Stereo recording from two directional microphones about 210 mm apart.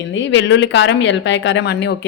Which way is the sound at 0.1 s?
60° left (ahead or behind).